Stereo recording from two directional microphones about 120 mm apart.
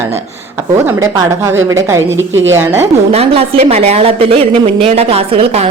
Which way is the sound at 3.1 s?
55° right (ahead or behind).